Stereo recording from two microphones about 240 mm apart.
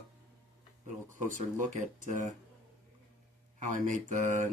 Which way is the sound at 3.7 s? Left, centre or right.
Right.